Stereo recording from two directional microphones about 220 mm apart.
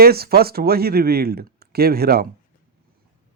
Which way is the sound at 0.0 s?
45° right (ahead or behind).